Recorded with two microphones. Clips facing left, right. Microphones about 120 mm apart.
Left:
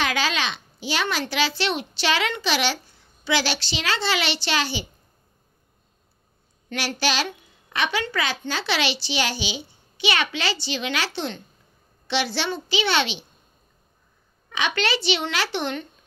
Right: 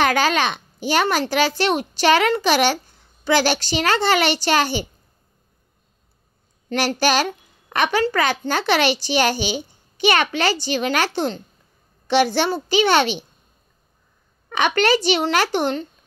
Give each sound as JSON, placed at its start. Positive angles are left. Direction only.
{"t": 0.0, "sound": "a child's voice", "side_deg": -50}
{"t": 6.7, "sound": "a woman's voice", "side_deg": -45}
{"t": 14.5, "sound": "a woman's voice", "side_deg": -50}